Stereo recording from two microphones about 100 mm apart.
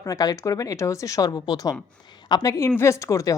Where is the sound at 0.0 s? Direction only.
35° left (ahead or behind).